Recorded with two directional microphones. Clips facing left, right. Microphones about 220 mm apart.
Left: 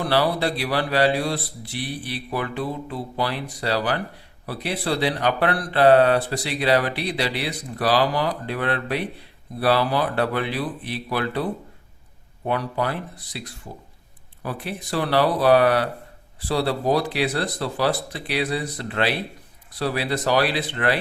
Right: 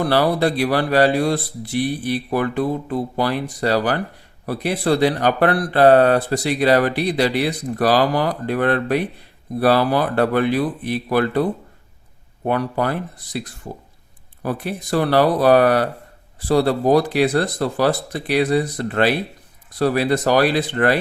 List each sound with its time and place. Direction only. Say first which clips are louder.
0.0 s speech: right 4 dB; 45° right (ahead or behind)
12.5 s speech: right 4 dB; 45° right (ahead or behind)
14.4 s speech: right 6 dB; 45° right (ahead or behind)